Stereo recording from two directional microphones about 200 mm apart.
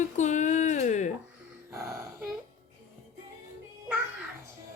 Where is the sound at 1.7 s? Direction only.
15° right (ahead or behind).